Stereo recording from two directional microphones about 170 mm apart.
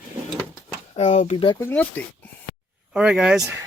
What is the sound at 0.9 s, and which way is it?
Speech, 35° left (ahead or behind).